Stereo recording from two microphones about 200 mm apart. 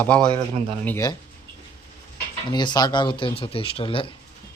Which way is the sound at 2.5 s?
20° left (ahead or behind).